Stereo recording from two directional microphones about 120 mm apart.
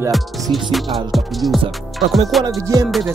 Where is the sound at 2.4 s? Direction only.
25° right (ahead or behind).